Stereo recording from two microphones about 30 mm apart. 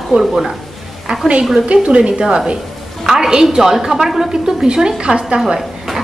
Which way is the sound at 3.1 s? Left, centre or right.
Right.